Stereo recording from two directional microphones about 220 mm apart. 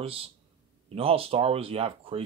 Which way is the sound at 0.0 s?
25° right (ahead or behind).